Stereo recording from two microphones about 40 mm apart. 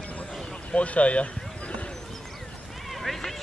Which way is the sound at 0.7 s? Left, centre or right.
Left.